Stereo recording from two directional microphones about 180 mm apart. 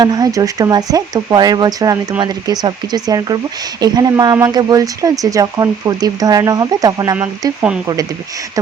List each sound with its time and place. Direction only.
0.0 s speech: 20° right (ahead or behind)
7.2 s speech: 10° right (ahead or behind)